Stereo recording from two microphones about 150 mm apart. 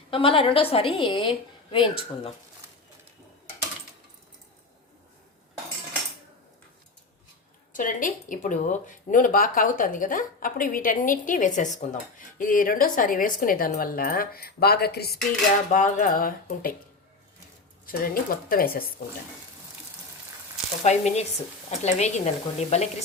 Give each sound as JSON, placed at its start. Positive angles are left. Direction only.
{"t": 0.1, "sound": "a woman's voice", "side_deg": 35}
{"t": 7.7, "sound": "speech", "side_deg": 60}
{"t": 17.8, "sound": "speech", "side_deg": 75}
{"t": 20.8, "sound": "speech", "side_deg": 50}